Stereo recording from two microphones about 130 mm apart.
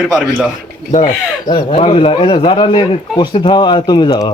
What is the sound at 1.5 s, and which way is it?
Speech, 50° left (ahead or behind).